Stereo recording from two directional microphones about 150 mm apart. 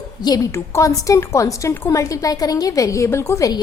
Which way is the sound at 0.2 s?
25° left (ahead or behind).